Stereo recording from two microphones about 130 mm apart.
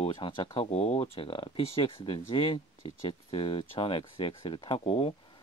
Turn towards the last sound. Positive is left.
turn(degrees=50)  # may be behind; listen again after turning